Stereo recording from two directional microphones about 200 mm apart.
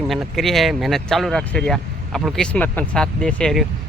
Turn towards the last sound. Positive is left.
turn(degrees=0)  # may be behind; listen again after turning